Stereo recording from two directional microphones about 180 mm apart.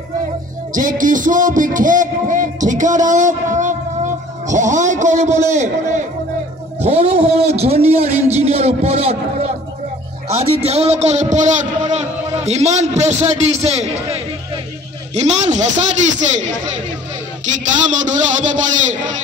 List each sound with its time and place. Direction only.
0.7 s a man's voice: 50° right (ahead or behind)
10.6 s a man's voice: 35° right (ahead or behind)
18.0 s a man's voice: 45° right (ahead or behind)